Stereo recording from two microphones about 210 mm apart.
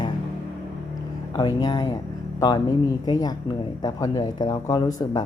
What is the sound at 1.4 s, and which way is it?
Speech, 20° left (ahead or behind).